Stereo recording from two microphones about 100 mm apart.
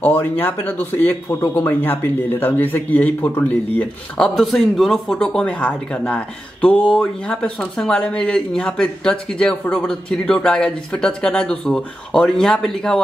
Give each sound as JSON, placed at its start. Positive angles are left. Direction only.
{"t": 0.0, "sound": "speech", "side_deg": 20}
{"t": 4.4, "sound": "speech", "side_deg": 5}